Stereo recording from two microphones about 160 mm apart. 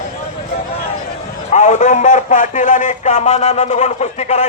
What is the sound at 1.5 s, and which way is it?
Speech, 50° left (ahead or behind).